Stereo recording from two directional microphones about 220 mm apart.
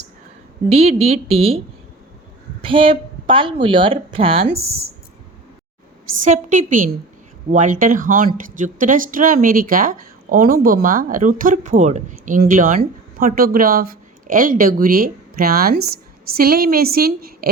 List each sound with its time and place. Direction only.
0.7 s speech: 30° right (ahead or behind)
6.2 s a woman's voice: 35° right (ahead or behind)